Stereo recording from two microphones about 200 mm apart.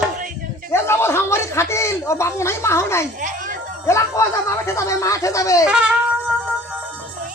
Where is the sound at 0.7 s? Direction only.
10° left (ahead or behind).